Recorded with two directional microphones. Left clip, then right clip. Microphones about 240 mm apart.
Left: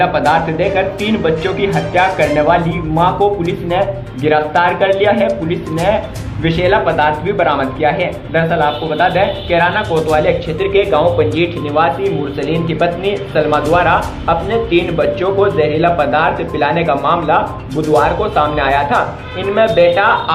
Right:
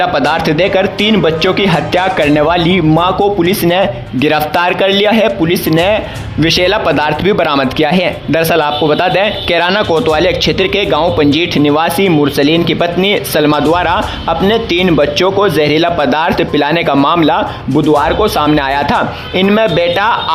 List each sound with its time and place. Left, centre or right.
0.0 s speech: right